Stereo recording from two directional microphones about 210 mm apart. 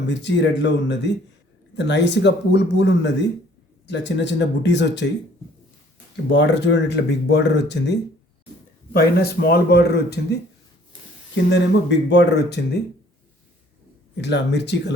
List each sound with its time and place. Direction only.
0.1 s speech: 55° left (ahead or behind)
6.3 s speech: 55° left (ahead or behind)
11.5 s speech: 55° left (ahead or behind)
14.2 s speech: 55° left (ahead or behind)